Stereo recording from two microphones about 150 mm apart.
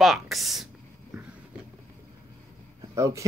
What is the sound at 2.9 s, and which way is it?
Speech, 20° right (ahead or behind).